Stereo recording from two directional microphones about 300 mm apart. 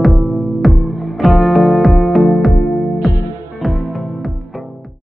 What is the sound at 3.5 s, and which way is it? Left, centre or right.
Music, centre.